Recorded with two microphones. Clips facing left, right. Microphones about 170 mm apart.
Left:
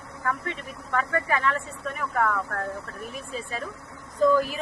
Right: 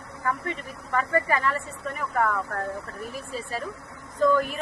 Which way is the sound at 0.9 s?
10° right (ahead or behind).